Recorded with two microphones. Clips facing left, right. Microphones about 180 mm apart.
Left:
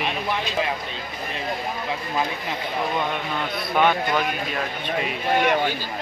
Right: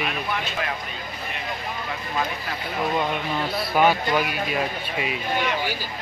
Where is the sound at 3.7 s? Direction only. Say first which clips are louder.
Even; 5° right (ahead or behind).